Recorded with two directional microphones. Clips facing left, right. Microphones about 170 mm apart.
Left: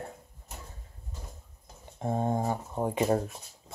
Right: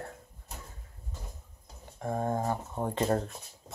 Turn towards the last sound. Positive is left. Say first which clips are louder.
# left 2 dB
turn(degrees=10)  # may be behind; listen again after turning